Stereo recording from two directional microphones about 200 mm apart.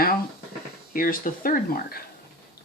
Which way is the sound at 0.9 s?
45° left (ahead or behind).